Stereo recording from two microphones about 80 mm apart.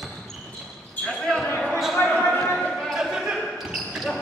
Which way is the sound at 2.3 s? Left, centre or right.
Centre.